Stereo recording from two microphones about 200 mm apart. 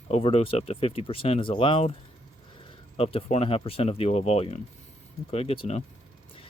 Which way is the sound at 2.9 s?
30° left (ahead or behind).